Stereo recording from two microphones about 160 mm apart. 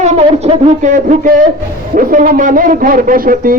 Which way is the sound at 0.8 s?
55° right (ahead or behind).